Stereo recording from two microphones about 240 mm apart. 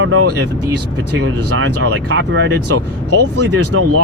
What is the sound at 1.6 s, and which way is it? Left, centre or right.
Speech, right.